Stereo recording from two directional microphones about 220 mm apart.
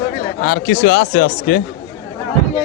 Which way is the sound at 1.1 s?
45° left (ahead or behind).